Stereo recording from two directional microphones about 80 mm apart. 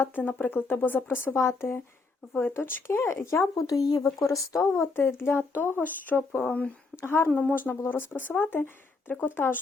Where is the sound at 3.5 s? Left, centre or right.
Left.